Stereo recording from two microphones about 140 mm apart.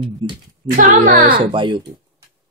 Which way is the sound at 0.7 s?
75° right (ahead or behind).